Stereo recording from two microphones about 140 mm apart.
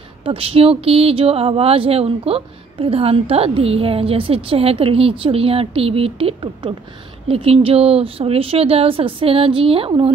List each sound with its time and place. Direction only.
0.2 s speech: 40° right (ahead or behind)